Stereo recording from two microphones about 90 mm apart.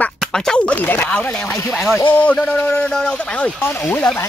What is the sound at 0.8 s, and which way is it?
Speech, 25° left (ahead or behind).